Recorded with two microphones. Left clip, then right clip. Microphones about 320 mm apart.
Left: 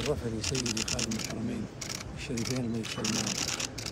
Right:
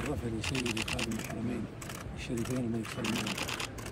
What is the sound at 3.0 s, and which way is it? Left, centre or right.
Speech, right.